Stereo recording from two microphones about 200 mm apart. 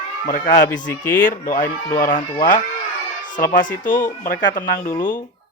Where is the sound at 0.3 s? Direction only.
40° left (ahead or behind).